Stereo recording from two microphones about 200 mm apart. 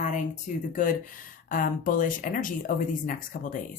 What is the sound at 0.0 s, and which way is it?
Speech, 40° left (ahead or behind).